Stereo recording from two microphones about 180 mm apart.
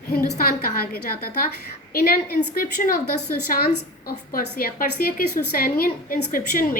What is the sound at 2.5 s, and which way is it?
A woman's voice, 55° left (ahead or behind).